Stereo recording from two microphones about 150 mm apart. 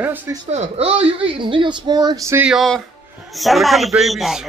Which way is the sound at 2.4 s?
Centre (ahead or behind).